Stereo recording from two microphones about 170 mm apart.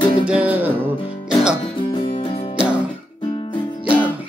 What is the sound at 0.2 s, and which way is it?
Music, 5° right (ahead or behind).